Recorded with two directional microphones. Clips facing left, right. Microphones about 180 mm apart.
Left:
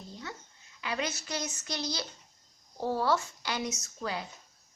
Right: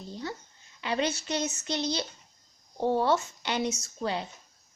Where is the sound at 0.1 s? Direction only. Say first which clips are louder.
Right 7 dB; 30° right (ahead or behind).